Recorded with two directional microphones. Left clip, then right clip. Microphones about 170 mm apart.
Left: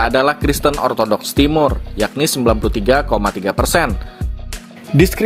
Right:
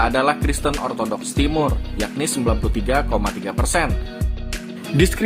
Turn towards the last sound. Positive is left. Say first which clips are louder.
# left 5 dB
turn(degrees=25)  # may be behind; listen again after turning